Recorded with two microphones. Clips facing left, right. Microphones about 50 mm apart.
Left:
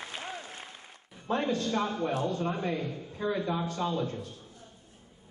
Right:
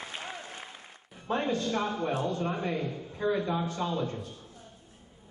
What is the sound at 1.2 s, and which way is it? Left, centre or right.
A man's voice, centre.